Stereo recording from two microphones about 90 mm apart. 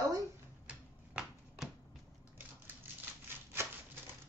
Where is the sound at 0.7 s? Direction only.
10° right (ahead or behind).